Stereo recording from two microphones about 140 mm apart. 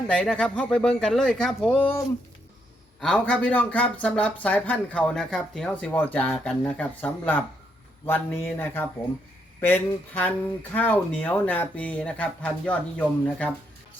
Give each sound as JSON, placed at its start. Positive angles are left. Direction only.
{"t": 0.1, "sound": "speech", "side_deg": 10}
{"t": 3.0, "sound": "speech", "side_deg": 5}